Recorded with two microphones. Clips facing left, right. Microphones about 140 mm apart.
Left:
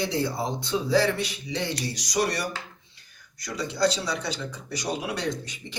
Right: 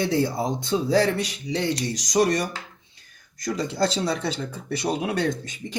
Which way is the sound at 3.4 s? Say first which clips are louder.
Right 1 dB; 45° right (ahead or behind).